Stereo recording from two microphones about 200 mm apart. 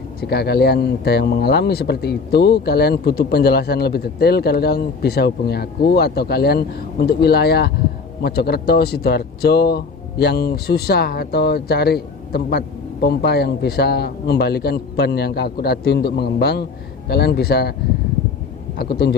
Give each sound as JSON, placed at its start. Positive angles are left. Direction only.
{"t": 0.2, "sound": "a man's voice", "side_deg": 50}
{"t": 18.8, "sound": "a man's voice", "side_deg": 55}